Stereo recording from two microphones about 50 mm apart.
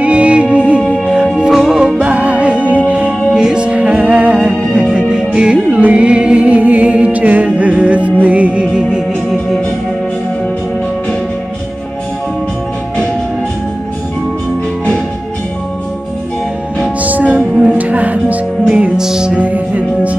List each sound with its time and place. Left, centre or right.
0.0 s music: right
1.0 s music: centre
2.0 s music: right
17.0 s music: right
18.9 s music: centre
19.3 s music: right